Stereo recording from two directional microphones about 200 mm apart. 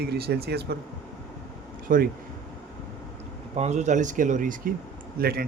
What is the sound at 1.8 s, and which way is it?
Speech, 45° right (ahead or behind).